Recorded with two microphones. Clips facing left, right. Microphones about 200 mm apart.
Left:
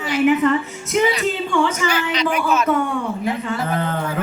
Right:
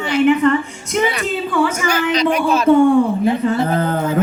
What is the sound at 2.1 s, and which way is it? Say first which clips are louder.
Speech: right 5 dB; 35° right (ahead or behind).